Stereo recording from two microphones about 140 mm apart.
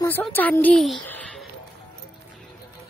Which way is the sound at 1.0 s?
10° left (ahead or behind).